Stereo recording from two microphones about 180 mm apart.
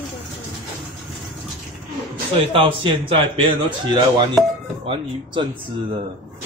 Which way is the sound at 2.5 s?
30° right (ahead or behind).